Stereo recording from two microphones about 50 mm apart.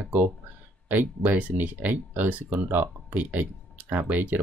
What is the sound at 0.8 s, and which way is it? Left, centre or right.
Speech, right.